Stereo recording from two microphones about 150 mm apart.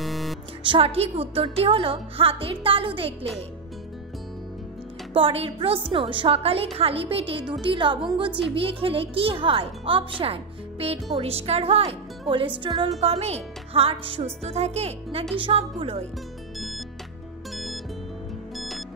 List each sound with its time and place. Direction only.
0.0 s music: centre (ahead or behind)
0.7 s a woman's voice: 40° right (ahead or behind)
5.1 s a woman's voice: 40° right (ahead or behind)
13.0 s a woman's voice: 45° right (ahead or behind)
16.5 s music: centre (ahead or behind)
18.6 s music: centre (ahead or behind)